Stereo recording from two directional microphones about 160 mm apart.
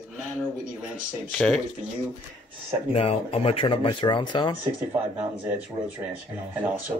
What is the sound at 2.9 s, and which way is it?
Speech, 40° left (ahead or behind).